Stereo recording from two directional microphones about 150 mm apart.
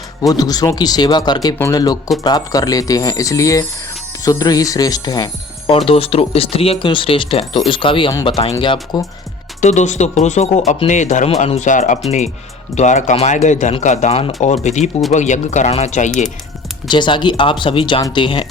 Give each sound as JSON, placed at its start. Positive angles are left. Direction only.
{"t": 0.2, "sound": "speech", "side_deg": 25}
{"t": 5.7, "sound": "speech", "side_deg": 40}
{"t": 9.6, "sound": "speech", "side_deg": 50}
{"t": 16.9, "sound": "speech", "side_deg": 30}